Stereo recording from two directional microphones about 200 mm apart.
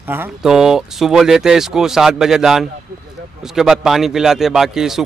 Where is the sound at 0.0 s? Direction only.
10° right (ahead or behind).